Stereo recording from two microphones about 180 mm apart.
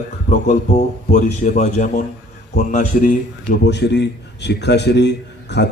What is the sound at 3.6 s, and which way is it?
A man's voice, 70° left (ahead or behind).